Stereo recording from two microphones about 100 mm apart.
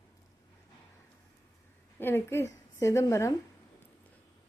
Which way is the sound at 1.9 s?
20° left (ahead or behind).